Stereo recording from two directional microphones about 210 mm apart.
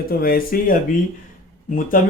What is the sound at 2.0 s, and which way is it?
Speech, 40° left (ahead or behind).